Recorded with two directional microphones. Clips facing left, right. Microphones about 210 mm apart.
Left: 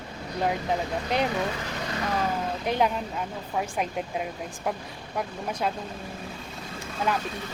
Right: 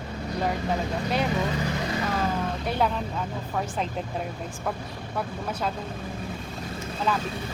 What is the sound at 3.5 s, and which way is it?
Speech, 10° left (ahead or behind).